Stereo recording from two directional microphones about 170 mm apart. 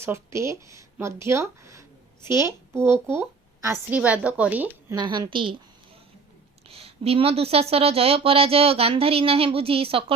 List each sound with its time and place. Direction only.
0.0 s a woman's voice: 15° right (ahead or behind)
4.9 s a woman's voice: 25° right (ahead or behind)
6.7 s speech: 35° right (ahead or behind)